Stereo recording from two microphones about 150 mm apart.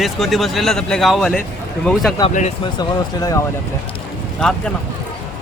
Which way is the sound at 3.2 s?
25° left (ahead or behind).